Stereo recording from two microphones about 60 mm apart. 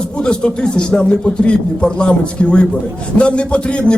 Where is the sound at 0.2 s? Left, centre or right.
Centre.